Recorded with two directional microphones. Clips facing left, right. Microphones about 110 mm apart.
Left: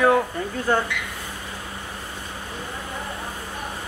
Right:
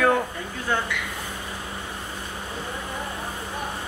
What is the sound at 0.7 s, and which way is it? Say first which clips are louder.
Speech: left 4 dB; 40° left (ahead or behind).